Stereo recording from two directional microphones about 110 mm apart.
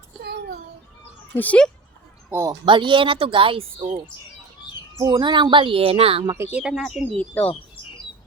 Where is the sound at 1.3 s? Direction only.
10° left (ahead or behind).